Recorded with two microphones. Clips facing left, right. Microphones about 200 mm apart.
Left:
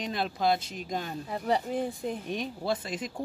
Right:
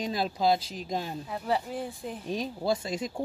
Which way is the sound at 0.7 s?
Centre (ahead or behind).